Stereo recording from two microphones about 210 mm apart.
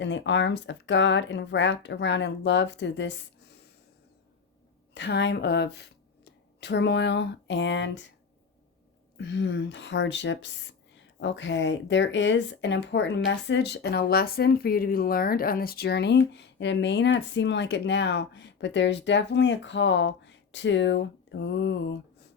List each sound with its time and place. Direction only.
0.0 s speech: 60° left (ahead or behind)
4.9 s speech: 55° left (ahead or behind)
9.1 s speech: 55° left (ahead or behind)